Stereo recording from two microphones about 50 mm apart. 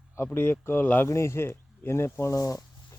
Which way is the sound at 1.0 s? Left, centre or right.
Left.